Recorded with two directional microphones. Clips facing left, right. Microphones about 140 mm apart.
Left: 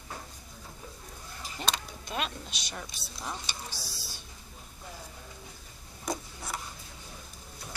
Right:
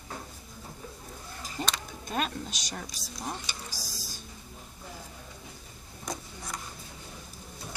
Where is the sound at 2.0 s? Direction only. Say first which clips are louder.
Right 4 dB; 45° right (ahead or behind).